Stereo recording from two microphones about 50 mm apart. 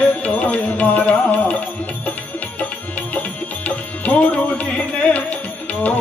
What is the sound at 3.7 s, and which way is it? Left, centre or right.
Tabla, left.